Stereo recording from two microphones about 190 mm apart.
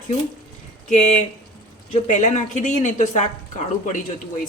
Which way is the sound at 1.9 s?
40° left (ahead or behind).